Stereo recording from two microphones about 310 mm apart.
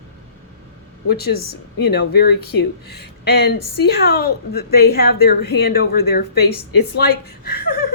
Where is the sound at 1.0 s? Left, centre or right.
Left.